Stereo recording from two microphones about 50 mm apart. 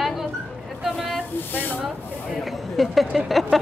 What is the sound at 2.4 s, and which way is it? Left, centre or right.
Speech, centre.